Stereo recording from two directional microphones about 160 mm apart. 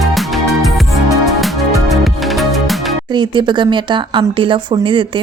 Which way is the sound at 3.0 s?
30° right (ahead or behind).